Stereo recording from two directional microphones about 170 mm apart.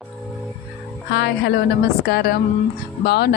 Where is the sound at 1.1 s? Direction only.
75° left (ahead or behind).